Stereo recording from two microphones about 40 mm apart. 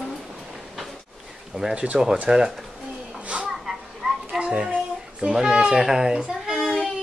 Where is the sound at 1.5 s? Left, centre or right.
Centre.